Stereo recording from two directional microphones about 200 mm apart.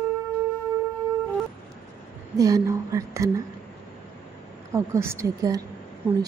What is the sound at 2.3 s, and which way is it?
Speech, 15° right (ahead or behind).